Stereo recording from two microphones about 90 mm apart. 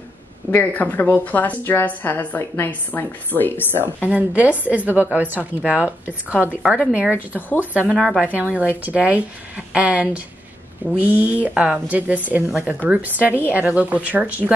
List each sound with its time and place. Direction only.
0.5 s speech: 20° left (ahead or behind)
4.1 s a woman's voice: 15° right (ahead or behind)
7.3 s speech: 20° left (ahead or behind)
7.7 s a woman's voice: 15° right (ahead or behind)